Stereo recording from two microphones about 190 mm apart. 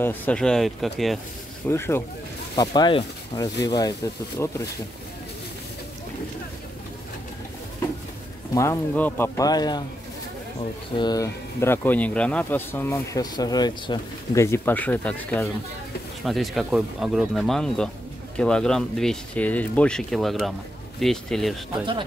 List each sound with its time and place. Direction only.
0.0 s speech: 10° left (ahead or behind)
1.7 s speech: 15° left (ahead or behind)
8.5 s speech: 10° left (ahead or behind)
11.0 s speech: 20° left (ahead or behind); by 21.5 s centre (ahead or behind)